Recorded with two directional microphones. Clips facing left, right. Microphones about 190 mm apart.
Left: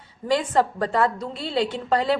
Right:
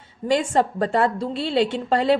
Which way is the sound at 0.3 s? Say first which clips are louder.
Right 1 dB; 25° right (ahead or behind).